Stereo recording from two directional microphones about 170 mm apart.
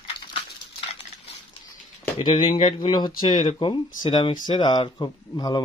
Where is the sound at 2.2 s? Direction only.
30° left (ahead or behind).